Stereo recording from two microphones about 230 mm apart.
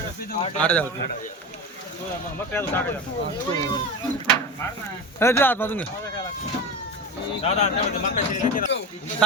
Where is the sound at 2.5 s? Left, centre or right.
Centre.